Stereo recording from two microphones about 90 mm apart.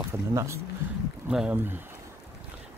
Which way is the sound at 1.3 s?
10° right (ahead or behind).